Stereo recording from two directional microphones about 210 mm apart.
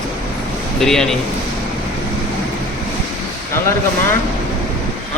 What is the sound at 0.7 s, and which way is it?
Speech, centre (ahead or behind).